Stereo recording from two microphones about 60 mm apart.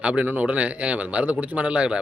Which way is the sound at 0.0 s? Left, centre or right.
Right.